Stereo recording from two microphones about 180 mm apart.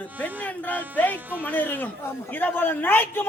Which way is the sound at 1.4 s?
10° left (ahead or behind).